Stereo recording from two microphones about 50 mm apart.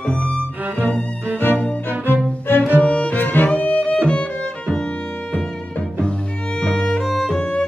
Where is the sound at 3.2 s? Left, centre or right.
Left.